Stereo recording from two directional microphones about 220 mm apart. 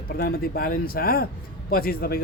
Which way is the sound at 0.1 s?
45° left (ahead or behind).